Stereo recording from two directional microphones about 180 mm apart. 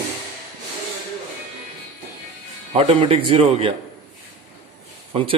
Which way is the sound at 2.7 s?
30° right (ahead or behind).